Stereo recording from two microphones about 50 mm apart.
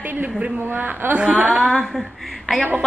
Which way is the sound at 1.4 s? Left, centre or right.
Centre.